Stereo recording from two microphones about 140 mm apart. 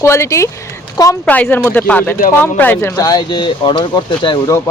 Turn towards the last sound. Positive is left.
turn(degrees=30)  # may be behind; listen again after turning